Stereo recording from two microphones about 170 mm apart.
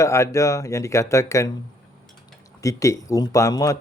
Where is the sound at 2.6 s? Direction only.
20° left (ahead or behind).